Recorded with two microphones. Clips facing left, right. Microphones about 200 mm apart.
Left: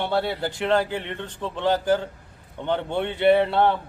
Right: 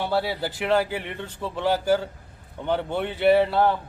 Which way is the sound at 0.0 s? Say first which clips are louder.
Left 1 dB; 5° right (ahead or behind).